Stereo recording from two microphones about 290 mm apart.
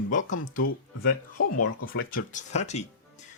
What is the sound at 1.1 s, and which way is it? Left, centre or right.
Speech, left.